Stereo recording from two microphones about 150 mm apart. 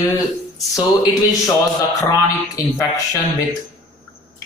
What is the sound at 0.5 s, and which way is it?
Speech, 25° left (ahead or behind).